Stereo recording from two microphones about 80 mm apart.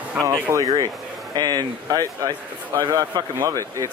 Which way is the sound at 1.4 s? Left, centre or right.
Right.